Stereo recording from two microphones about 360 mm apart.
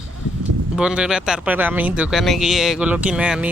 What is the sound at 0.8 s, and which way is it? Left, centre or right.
Speech, centre.